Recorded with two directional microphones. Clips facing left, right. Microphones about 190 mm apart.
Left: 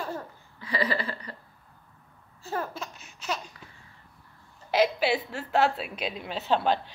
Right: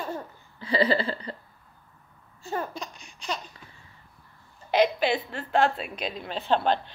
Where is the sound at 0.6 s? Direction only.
30° right (ahead or behind).